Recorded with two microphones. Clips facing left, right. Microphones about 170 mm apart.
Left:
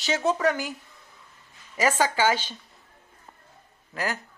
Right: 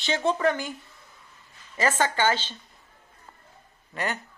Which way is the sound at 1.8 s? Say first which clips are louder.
Left 1 dB; 10° left (ahead or behind).